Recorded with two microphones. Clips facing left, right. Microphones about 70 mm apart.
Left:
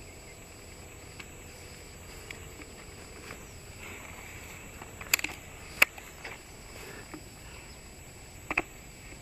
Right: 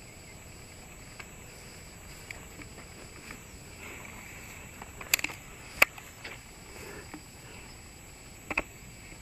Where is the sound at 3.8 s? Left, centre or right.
Centre.